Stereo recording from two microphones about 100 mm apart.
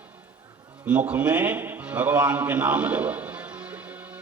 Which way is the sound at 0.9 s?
15° right (ahead or behind).